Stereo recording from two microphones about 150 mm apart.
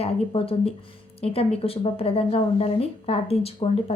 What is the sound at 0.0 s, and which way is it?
A woman's voice, 40° left (ahead or behind).